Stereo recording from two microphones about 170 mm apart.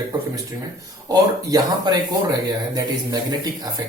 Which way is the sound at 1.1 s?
20° right (ahead or behind).